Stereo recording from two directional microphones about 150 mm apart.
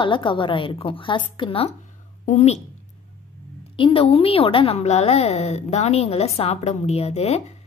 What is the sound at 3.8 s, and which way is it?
A woman's voice, 40° left (ahead or behind).